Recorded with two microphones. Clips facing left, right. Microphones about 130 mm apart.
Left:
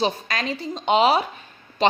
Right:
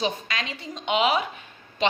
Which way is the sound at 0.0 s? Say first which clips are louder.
Left 4 dB; 40° left (ahead or behind).